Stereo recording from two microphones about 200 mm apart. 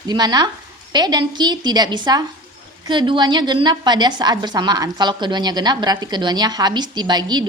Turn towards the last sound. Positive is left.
turn(degrees=-20)  # may be behind; listen again after turning